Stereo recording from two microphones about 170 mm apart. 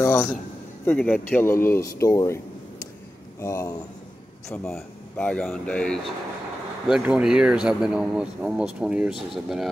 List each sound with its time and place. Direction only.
0.0 s a sound: 15° left (ahead or behind)
0.8 s speech: 10° left (ahead or behind)
4.6 s speech: 5° left (ahead or behind)
6.9 s speech: 5° right (ahead or behind)